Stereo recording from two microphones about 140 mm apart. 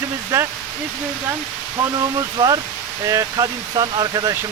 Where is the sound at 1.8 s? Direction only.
30° right (ahead or behind).